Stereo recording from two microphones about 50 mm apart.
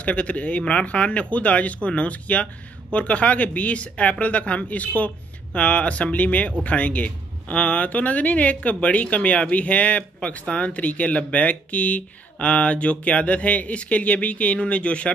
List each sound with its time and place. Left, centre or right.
0.0 s speech: left